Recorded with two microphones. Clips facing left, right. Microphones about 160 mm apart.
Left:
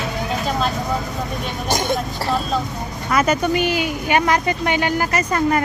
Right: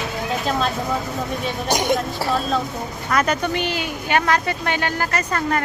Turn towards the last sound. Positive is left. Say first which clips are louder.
# left 4 dB
turn(degrees=10)  # may be behind; listen again after turning